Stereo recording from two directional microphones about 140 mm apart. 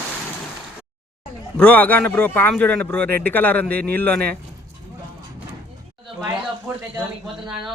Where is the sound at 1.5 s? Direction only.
10° left (ahead or behind).